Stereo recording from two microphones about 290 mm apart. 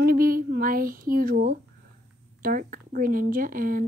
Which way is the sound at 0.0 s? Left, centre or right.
Right.